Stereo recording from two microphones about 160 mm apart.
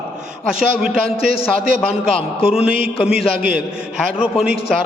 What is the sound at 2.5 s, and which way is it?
A man's voice, 5° right (ahead or behind).